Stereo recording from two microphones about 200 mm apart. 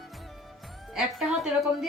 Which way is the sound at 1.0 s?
Centre (ahead or behind).